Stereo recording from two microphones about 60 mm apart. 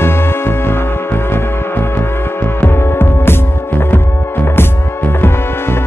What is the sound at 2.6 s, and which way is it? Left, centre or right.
Music, left.